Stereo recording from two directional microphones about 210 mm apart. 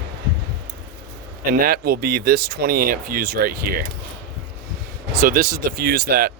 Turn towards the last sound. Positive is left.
turn(degrees=-45)  # may be behind; listen again after turning